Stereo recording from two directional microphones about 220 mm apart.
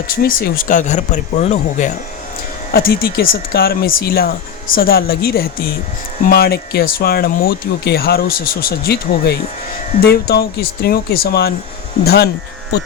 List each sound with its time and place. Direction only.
0.2 s speech: 40° left (ahead or behind)
2.7 s speech: 45° left (ahead or behind)